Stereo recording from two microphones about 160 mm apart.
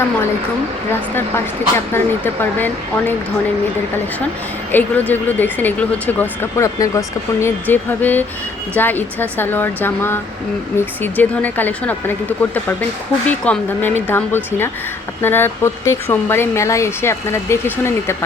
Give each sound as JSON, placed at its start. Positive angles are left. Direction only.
{"t": 1.7, "sound": "speech", "side_deg": 15}
{"t": 4.7, "sound": "speech", "side_deg": 10}
{"t": 13.4, "sound": "speech", "side_deg": 10}